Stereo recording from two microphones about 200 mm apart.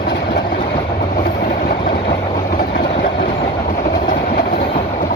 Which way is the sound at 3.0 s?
50° left (ahead or behind).